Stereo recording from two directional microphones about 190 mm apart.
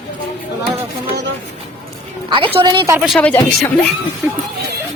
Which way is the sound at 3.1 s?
5° left (ahead or behind).